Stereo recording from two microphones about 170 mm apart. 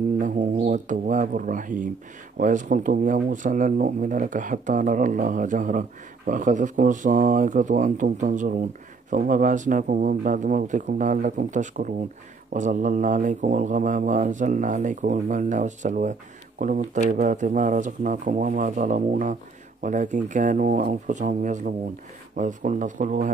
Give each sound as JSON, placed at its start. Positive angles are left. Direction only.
{"t": 0.7, "sound": "speech", "side_deg": -50}